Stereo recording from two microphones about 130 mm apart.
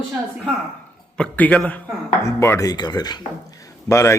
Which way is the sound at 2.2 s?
20° left (ahead or behind).